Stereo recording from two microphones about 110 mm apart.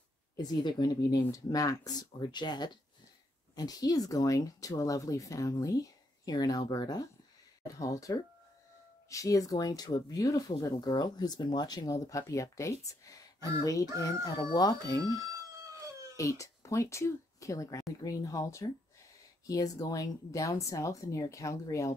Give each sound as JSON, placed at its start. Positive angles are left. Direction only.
{"t": 0.4, "sound": "speech", "side_deg": 40}
{"t": 16.2, "sound": "speech", "side_deg": 30}